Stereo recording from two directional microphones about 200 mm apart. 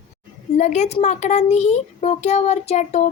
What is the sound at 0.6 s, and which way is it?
Speech, 35° left (ahead or behind).